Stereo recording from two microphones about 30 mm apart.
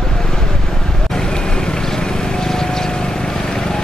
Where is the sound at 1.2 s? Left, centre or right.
Left.